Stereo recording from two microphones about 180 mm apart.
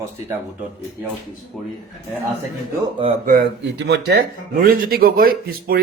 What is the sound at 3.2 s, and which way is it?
Speech, 55° right (ahead or behind).